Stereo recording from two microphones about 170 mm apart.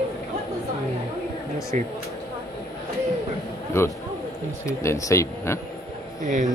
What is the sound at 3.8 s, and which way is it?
Speech, 15° left (ahead or behind).